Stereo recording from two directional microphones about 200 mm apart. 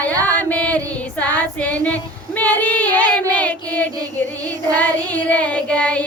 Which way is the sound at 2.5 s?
10° left (ahead or behind).